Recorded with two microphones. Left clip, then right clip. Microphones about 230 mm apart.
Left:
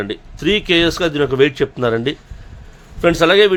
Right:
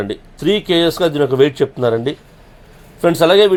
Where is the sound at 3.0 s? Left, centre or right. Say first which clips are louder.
Right 1 dB; centre.